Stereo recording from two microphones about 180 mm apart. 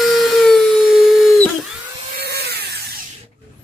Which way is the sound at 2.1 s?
60° right (ahead or behind).